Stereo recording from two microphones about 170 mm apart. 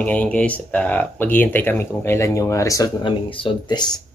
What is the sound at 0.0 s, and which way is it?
Speech, 10° left (ahead or behind).